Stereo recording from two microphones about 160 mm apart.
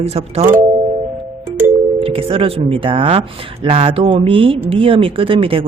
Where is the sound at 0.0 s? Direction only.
40° right (ahead or behind).